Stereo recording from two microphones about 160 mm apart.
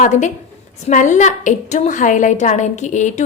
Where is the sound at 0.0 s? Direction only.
50° left (ahead or behind).